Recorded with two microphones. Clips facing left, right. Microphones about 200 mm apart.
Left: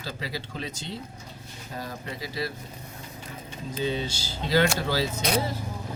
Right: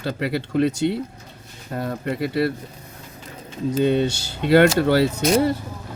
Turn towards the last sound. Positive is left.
turn(degrees=-60)  # may be behind; listen again after turning